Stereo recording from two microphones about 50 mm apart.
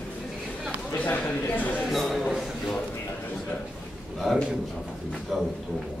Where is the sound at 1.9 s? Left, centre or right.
Centre.